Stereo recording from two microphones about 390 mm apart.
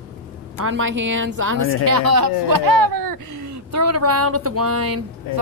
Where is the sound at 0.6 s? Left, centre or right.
Right.